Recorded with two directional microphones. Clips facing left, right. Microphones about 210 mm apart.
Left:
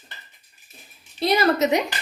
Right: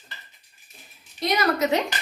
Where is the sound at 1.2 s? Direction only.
30° left (ahead or behind).